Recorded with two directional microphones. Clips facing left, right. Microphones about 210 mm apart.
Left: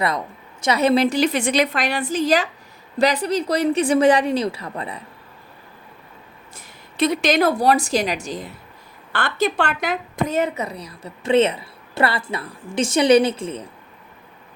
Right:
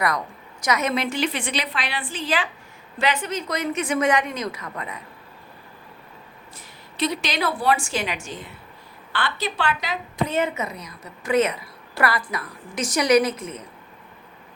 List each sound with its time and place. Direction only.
0.6 s a woman's voice: 30° left (ahead or behind)
6.9 s a woman's voice: 50° left (ahead or behind)
9.1 s a woman's voice: 50° left (ahead or behind); by 13.7 s 30° left (ahead or behind)